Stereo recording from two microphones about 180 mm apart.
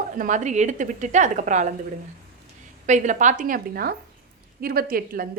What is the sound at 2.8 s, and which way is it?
A woman's voice, 40° right (ahead or behind).